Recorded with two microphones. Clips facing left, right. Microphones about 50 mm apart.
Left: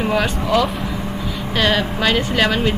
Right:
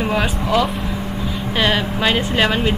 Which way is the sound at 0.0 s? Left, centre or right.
Centre.